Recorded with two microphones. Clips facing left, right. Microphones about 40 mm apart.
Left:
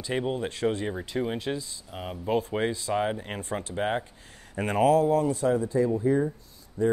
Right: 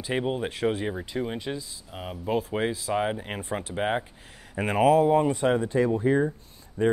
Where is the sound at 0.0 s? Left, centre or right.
Centre.